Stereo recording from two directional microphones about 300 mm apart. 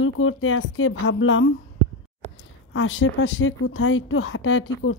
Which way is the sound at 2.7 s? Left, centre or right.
Left.